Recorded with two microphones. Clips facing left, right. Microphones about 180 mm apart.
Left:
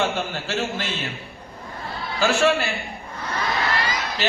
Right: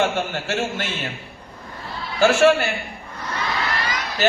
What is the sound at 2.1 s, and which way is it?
Speech, 50° right (ahead or behind).